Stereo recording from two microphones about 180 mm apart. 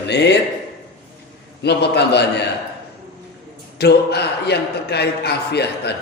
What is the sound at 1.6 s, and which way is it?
Speech, 70° left (ahead or behind).